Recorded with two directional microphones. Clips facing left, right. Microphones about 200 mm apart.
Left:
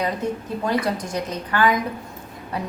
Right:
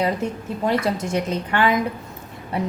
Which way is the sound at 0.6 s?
25° right (ahead or behind).